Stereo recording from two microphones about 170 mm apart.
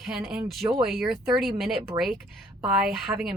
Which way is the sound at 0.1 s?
Centre (ahead or behind).